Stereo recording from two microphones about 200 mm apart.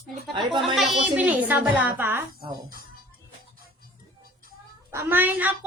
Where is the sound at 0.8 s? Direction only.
Centre (ahead or behind).